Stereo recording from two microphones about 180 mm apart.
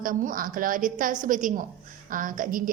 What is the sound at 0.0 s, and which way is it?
A woman's voice, 50° right (ahead or behind).